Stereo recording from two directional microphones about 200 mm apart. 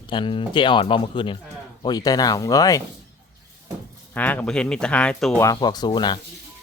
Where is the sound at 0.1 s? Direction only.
25° left (ahead or behind).